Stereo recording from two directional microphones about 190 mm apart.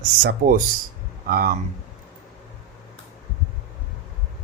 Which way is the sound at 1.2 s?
50° right (ahead or behind).